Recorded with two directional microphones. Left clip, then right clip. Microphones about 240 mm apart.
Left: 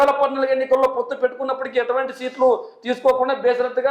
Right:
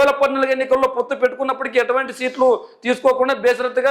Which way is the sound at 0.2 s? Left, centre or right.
Right.